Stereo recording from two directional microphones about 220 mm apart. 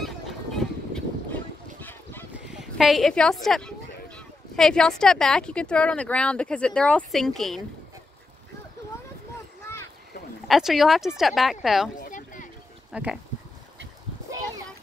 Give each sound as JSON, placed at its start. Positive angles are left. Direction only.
{"t": 0.0, "sound": "goose", "side_deg": 0}
{"t": 10.5, "sound": "speech", "side_deg": 0}
{"t": 12.0, "sound": "a sound", "side_deg": 35}
{"t": 12.9, "sound": "speech", "side_deg": -5}